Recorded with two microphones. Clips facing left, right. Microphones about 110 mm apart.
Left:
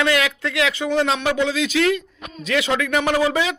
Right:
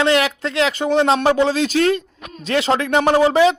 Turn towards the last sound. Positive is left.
turn(degrees=-35)  # may be behind; listen again after turning